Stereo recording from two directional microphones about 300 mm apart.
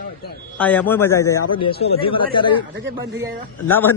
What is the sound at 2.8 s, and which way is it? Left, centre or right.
Speech, right.